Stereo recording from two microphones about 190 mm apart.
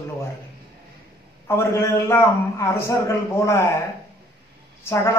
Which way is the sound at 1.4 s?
15° left (ahead or behind).